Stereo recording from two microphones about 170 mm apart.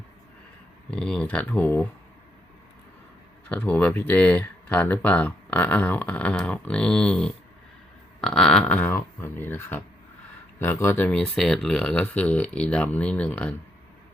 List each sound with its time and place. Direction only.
0.9 s speech: 5° left (ahead or behind)
3.5 s speech: 10° left (ahead or behind)